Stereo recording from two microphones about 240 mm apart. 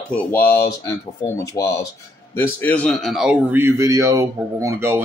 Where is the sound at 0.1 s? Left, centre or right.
Centre.